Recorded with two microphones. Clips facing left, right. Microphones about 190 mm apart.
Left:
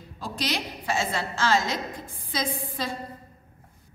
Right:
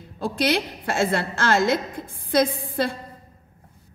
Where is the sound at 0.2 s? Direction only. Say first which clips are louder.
Right 8 dB; 55° right (ahead or behind).